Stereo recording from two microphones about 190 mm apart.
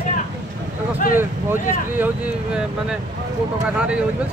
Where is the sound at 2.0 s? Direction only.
5° right (ahead or behind).